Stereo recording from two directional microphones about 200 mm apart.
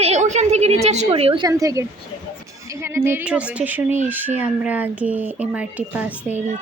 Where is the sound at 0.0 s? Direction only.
35° right (ahead or behind).